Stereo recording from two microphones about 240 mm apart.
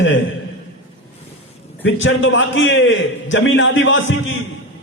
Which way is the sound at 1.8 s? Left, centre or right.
Left.